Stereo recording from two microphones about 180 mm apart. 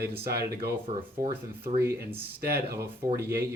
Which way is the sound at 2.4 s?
60° right (ahead or behind).